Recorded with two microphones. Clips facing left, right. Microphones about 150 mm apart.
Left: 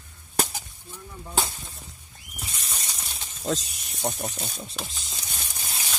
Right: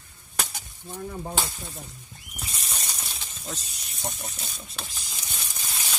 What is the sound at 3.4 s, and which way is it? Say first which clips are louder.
Speech: left 11 dB; 90° left.